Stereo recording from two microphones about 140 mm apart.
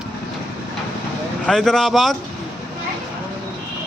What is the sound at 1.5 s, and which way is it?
Speech, 5° left (ahead or behind).